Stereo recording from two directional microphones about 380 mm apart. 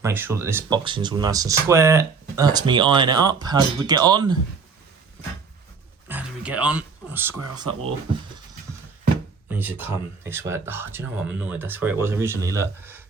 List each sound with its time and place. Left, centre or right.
0.0 s speech: centre
6.1 s speech: centre
9.5 s speech: centre